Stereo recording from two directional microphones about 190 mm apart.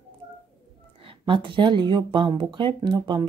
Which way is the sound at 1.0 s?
25° right (ahead or behind).